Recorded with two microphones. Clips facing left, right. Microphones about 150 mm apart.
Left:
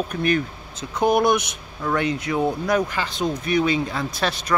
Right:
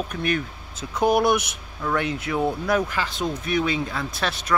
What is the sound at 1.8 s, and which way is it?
Speech, centre (ahead or behind).